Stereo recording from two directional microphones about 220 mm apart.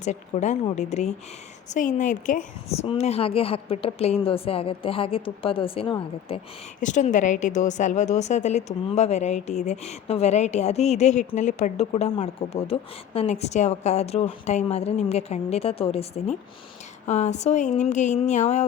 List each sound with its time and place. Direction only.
0.0 s a woman's voice: 30° left (ahead or behind)